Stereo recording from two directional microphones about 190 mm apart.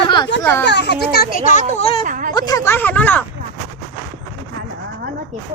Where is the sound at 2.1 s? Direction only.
45° right (ahead or behind).